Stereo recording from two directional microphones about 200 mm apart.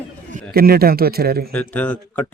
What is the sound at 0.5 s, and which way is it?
Speech, 50° right (ahead or behind).